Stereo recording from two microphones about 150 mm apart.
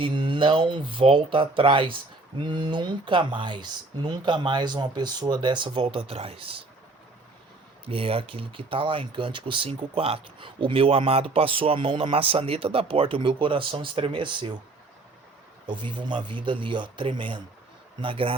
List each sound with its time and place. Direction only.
0.0 s speech: 35° right (ahead or behind)
7.9 s speech: 35° right (ahead or behind)
15.6 s speech: 30° right (ahead or behind)